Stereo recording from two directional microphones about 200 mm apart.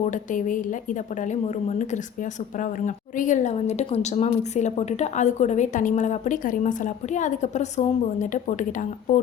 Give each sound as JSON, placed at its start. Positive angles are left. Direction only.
{"t": 0.0, "sound": "a woman's voice", "side_deg": 40}